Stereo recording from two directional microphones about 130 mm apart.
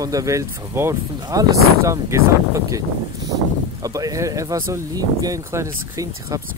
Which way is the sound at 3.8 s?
25° right (ahead or behind).